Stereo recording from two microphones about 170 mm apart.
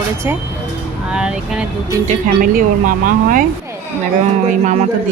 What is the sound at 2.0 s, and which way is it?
Speech, 55° right (ahead or behind).